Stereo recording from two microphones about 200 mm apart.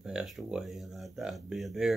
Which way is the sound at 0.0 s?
Centre (ahead or behind).